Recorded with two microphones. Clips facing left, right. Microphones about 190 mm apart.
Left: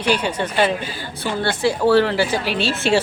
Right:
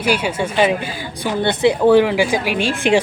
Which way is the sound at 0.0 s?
10° right (ahead or behind).